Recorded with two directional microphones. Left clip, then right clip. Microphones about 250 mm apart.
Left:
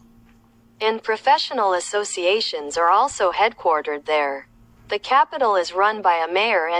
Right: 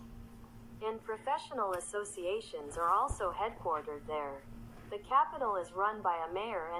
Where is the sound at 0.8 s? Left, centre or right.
Left.